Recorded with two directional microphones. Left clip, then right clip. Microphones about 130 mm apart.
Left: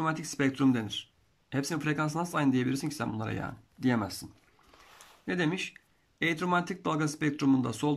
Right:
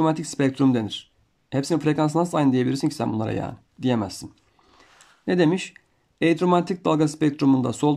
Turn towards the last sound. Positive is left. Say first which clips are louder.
# right 8 dB
turn(degrees=-35)  # may be behind; listen again after turning